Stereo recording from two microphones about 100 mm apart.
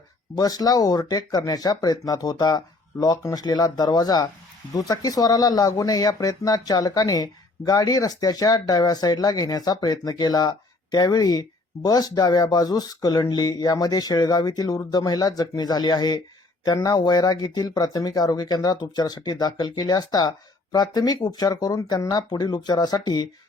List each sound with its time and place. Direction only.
0.3 s speech: 40° left (ahead or behind)